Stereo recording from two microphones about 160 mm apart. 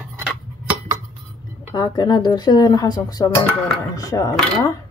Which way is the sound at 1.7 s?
25° left (ahead or behind).